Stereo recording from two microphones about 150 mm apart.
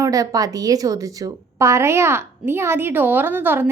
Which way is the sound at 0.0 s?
25° right (ahead or behind).